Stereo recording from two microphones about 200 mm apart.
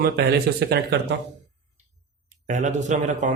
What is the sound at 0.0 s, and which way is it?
Speech, 55° right (ahead or behind).